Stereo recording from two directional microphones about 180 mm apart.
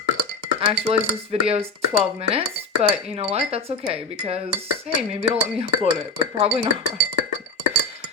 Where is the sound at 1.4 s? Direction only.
35° right (ahead or behind).